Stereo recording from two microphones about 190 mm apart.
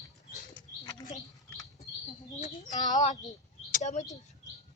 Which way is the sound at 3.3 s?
40° left (ahead or behind).